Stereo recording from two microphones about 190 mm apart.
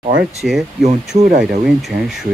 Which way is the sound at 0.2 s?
5° right (ahead or behind).